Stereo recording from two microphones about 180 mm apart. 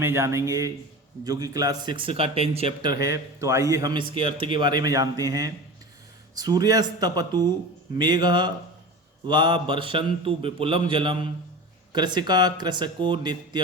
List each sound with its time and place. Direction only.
0.0 s a man's voice: 15° right (ahead or behind)